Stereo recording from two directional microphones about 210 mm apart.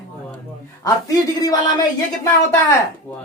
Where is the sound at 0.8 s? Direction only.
15° left (ahead or behind).